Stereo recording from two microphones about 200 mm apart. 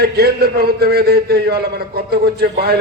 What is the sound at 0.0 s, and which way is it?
A man's voice, 50° right (ahead or behind).